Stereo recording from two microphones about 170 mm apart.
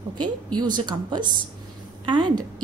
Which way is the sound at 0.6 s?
25° right (ahead or behind).